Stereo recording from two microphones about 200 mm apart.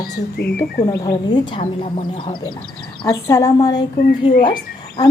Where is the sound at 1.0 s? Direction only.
20° left (ahead or behind).